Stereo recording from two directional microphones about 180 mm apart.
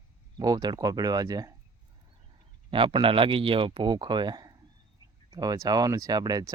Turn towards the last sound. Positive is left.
turn(degrees=-20)  # may be behind; listen again after turning